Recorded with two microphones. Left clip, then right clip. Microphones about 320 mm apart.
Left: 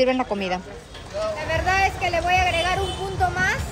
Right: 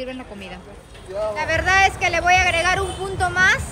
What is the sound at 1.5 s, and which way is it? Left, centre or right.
A man's voice, centre.